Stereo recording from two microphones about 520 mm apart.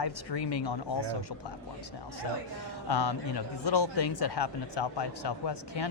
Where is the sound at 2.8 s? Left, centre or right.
Left.